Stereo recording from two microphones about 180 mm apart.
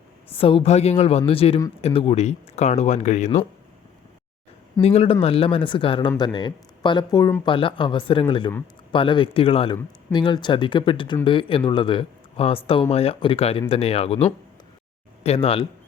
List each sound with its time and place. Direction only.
0.3 s speech: 30° left (ahead or behind)
4.8 s speech: 35° left (ahead or behind)